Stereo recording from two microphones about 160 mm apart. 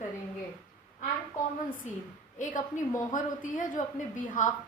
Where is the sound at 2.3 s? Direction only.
55° left (ahead or behind).